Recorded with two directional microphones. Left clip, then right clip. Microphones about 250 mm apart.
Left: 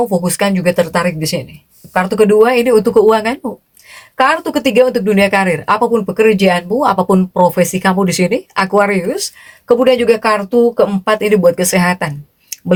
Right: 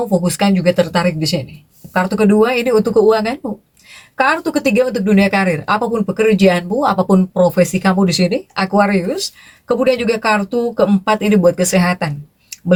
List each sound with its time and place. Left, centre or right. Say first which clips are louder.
0.2 s speech: left 2 dB; left